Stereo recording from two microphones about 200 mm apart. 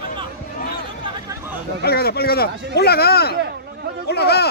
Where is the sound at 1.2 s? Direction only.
10° right (ahead or behind).